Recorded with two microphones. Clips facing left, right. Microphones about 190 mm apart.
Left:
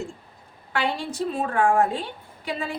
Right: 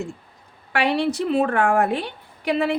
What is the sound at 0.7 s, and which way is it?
A woman's voice, 70° right (ahead or behind).